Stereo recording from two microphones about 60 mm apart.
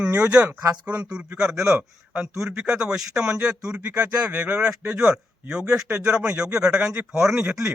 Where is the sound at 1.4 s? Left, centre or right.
Centre.